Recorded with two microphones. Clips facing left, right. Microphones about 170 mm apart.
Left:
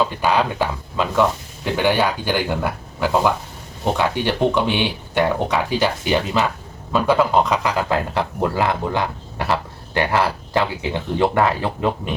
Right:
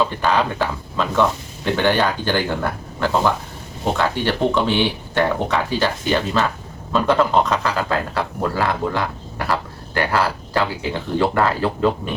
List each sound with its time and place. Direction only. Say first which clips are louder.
0.2 s speech: even; 10° left (ahead or behind)